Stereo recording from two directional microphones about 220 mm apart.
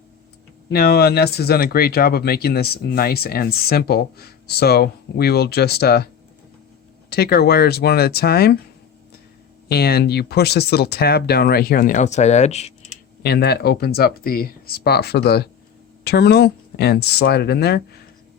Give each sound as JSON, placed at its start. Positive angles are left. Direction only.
{"t": 0.7, "sound": "speech", "side_deg": 45}
{"t": 7.1, "sound": "speech", "side_deg": 45}
{"t": 9.6, "sound": "speech", "side_deg": 45}
{"t": 13.2, "sound": "speech", "side_deg": 45}